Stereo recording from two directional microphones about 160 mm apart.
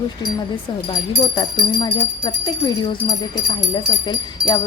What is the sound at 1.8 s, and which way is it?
Speech, 25° left (ahead or behind).